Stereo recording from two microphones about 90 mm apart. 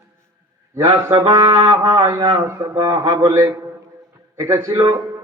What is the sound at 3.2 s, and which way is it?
Speech, 35° right (ahead or behind).